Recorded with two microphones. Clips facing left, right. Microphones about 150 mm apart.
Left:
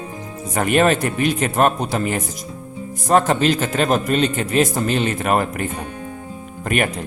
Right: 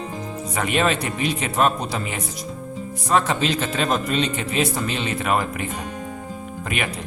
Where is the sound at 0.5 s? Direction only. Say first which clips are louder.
Left 5 dB; 50° left (ahead or behind).